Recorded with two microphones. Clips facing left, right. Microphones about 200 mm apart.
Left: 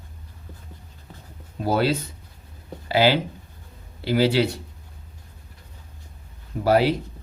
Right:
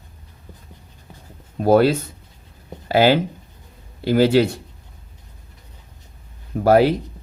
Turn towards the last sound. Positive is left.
turn(degrees=-50)  # may be behind; listen again after turning